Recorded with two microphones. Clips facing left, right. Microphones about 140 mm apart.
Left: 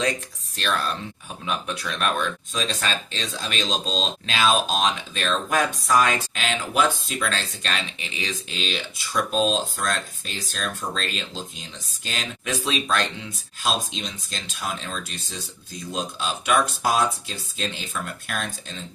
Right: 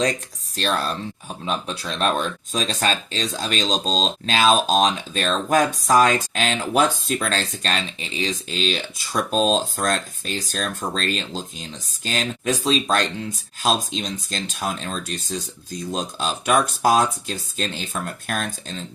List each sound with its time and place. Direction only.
0.0 s speech: 35° right (ahead or behind)